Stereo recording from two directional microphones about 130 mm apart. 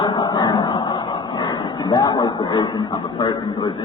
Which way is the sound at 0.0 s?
35° left (ahead or behind).